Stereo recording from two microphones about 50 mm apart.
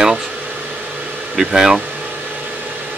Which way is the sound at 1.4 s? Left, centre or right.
Centre.